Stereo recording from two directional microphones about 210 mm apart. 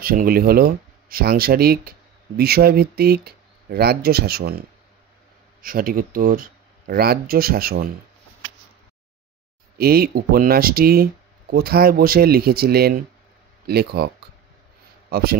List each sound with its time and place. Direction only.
0.0 s speech: 45° right (ahead or behind)
9.8 s a man's voice: 45° right (ahead or behind)